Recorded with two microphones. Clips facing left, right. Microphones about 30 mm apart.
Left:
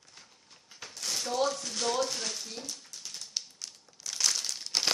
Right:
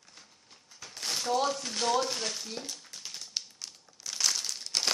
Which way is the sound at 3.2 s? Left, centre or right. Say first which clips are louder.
Even; centre.